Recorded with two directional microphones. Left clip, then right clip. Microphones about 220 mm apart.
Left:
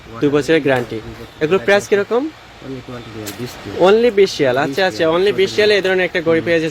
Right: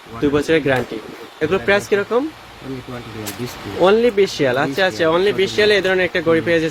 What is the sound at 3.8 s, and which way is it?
Speech, 20° left (ahead or behind).